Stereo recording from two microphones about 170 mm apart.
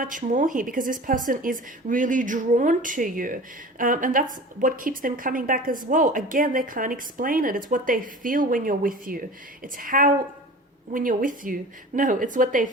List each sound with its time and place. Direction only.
0.0 s a woman's voice: 50° right (ahead or behind)